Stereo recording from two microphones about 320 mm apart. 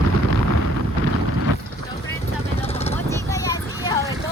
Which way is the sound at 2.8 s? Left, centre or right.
Centre.